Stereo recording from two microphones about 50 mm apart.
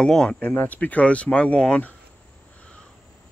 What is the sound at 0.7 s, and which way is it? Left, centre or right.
Speech, left.